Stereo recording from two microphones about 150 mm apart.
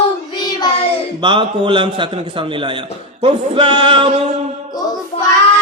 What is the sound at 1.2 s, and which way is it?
Speech, 35° right (ahead or behind).